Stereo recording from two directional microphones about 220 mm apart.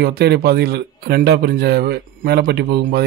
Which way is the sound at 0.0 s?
50° right (ahead or behind).